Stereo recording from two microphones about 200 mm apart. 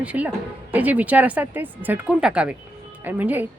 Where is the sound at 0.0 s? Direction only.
5° right (ahead or behind).